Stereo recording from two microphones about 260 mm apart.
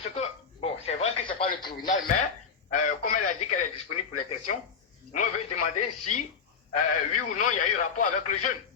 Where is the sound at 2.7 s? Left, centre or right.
Left.